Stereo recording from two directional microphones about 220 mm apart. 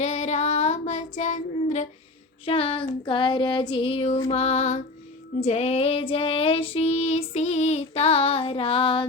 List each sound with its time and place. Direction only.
0.0 s child singing: 30° left (ahead or behind)